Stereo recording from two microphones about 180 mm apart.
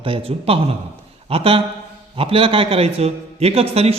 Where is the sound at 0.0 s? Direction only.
30° right (ahead or behind).